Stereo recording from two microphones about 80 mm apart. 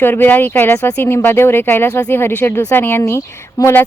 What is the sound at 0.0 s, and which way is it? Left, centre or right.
A woman's voice, left.